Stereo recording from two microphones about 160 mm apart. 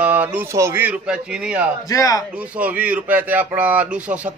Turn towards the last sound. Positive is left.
turn(degrees=-10)  # may be behind; listen again after turning